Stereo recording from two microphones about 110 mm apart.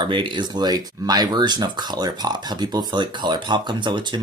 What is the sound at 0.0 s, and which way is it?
Speech, 45° right (ahead or behind).